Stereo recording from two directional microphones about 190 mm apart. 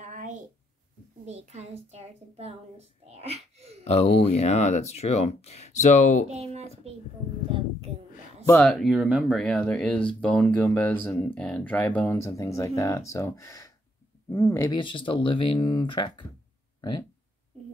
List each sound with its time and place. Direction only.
0.0 s a sound: 40° right (ahead or behind)
1.2 s a woman's voice: 35° right (ahead or behind)
3.8 s speech: 35° left (ahead or behind)
6.2 s a woman's voice: 35° right (ahead or behind)
8.5 s speech: 10° left (ahead or behind)
8.7 s speech: 5° right (ahead or behind); by 16.3 s 25° left (ahead or behind)